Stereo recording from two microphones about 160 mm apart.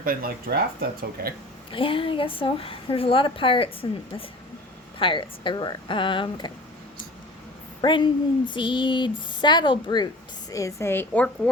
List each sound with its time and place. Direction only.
0.0 s speech: 65° right (ahead or behind)
1.7 s a woman's voice: 35° left (ahead or behind)
4.9 s a woman's voice: 30° left (ahead or behind)
7.8 s a woman's voice: 30° left (ahead or behind); by 11.3 s 10° left (ahead or behind)